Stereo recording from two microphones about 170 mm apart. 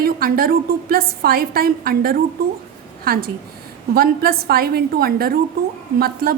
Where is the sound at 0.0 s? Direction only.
60° right (ahead or behind).